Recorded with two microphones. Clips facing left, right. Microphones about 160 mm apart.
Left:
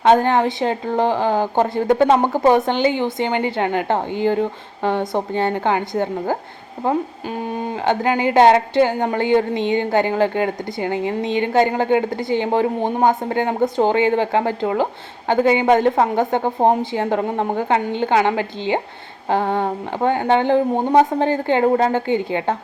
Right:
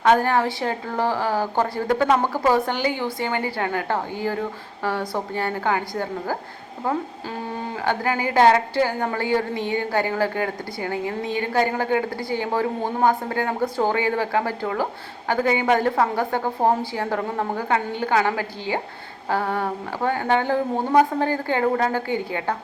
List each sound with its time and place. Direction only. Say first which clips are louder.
0.0 s speech: left 4 dB; 25° left (ahead or behind)